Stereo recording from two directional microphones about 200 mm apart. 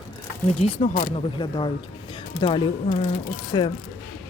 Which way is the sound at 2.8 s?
35° left (ahead or behind).